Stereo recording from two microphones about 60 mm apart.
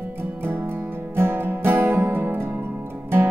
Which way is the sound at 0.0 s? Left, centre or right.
Right.